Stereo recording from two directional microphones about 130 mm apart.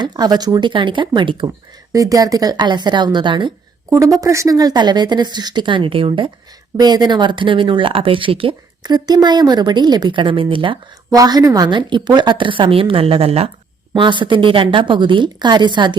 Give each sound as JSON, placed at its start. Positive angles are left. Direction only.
{"t": 0.0, "sound": "speech", "side_deg": -35}
{"t": 1.9, "sound": "speech", "side_deg": -25}
{"t": 3.8, "sound": "speech", "side_deg": -20}
{"t": 8.8, "sound": "speech", "side_deg": -30}
{"t": 11.1, "sound": "speech", "side_deg": -30}
{"t": 13.9, "sound": "speech", "side_deg": -40}